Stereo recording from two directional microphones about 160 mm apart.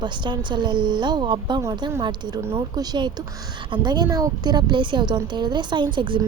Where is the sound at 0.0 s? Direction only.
30° right (ahead or behind).